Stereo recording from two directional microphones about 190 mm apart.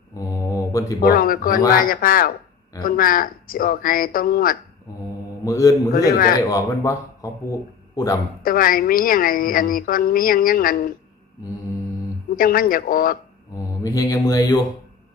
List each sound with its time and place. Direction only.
0.3 s mantra: 15° left (ahead or behind)
1.0 s a woman's voice: 50° left (ahead or behind)
5.5 s speech: 20° left (ahead or behind)
5.9 s a woman's voice: 50° left (ahead or behind)
6.5 s speech: 20° left (ahead or behind)
8.4 s a woman's voice: 50° left (ahead or behind)
12.4 s a woman's voice: 50° left (ahead or behind)
13.8 s speech: 20° left (ahead or behind)